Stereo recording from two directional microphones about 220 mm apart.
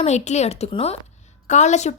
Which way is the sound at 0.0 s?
30° left (ahead or behind).